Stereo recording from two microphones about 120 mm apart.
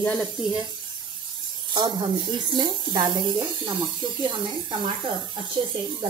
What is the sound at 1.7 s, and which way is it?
Speech, 40° right (ahead or behind).